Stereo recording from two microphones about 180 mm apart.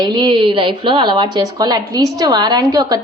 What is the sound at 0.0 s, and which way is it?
A woman's voice, 25° right (ahead or behind).